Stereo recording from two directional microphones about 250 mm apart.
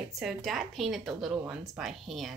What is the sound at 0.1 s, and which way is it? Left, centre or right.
Speech, centre.